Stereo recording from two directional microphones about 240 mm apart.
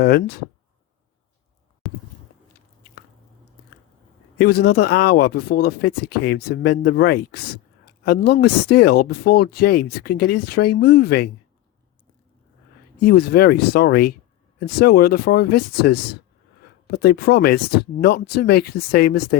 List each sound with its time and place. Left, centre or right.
0.0 s speech: left
4.4 s speech: left
13.1 s speech: left